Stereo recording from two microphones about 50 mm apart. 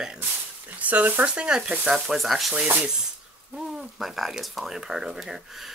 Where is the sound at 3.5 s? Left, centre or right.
Centre.